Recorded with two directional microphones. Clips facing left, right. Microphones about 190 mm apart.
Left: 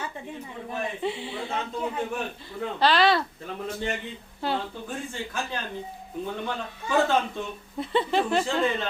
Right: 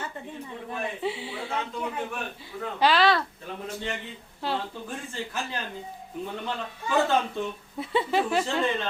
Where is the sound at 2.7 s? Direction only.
10° right (ahead or behind).